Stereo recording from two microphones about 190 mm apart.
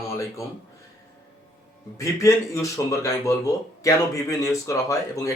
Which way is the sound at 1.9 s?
15° left (ahead or behind).